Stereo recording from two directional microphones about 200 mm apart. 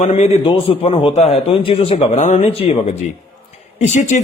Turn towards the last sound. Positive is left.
turn(degrees=35)  # may be behind; listen again after turning